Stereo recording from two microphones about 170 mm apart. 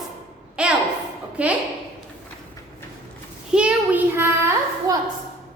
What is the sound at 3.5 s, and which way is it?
Child singing, 5° right (ahead or behind).